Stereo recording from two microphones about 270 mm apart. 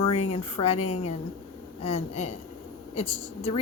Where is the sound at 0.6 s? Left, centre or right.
Left.